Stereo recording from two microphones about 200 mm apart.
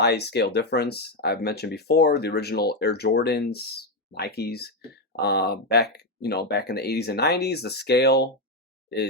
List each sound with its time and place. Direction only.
0.0 s speech: 55° left (ahead or behind)